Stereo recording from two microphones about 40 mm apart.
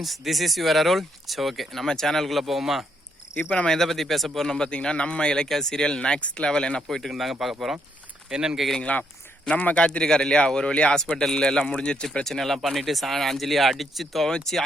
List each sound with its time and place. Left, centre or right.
0.0 s speech: centre
2.4 s speech: centre
4.4 s a man's voice: centre
7.1 s speech: centre
8.8 s a man's voice: left
10.0 s a man's voice: centre
12.2 s speech: centre
14.5 s speech: centre